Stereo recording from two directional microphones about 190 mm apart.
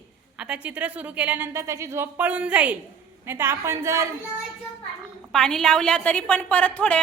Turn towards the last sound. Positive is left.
turn(degrees=5)  # may be behind; listen again after turning